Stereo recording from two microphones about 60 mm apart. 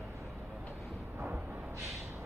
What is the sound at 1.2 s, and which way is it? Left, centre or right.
Music, right.